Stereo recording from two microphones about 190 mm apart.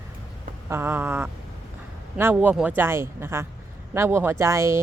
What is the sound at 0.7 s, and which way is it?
A man's voice, 10° right (ahead or behind).